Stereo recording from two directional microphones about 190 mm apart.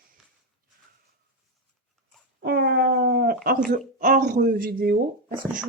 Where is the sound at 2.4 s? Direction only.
55° right (ahead or behind).